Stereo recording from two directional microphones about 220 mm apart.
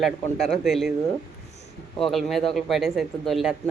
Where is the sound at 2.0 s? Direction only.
Centre (ahead or behind).